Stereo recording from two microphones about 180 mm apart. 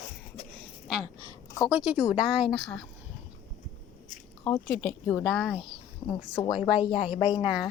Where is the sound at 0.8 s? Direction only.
Centre (ahead or behind).